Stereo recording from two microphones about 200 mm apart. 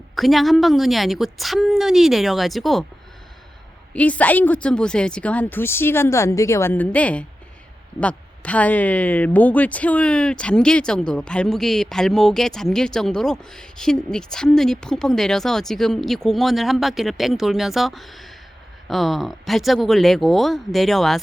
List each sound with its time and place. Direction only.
0.2 s speech: centre (ahead or behind)
3.9 s speech: 5° left (ahead or behind)